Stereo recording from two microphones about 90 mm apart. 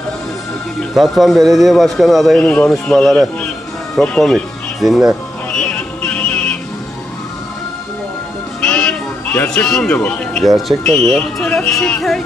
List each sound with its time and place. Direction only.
0.9 s a man's voice: centre (ahead or behind)
2.4 s a man's voice: 10° left (ahead or behind); by 5.1 s 5° right (ahead or behind)
5.5 s music: 5° left (ahead or behind)
8.5 s music: 10° left (ahead or behind)
9.5 s speech: 5° left (ahead or behind)
10.4 s a man's voice: centre (ahead or behind)